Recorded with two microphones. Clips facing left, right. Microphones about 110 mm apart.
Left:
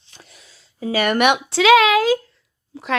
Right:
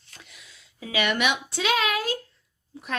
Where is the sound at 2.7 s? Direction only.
90° left.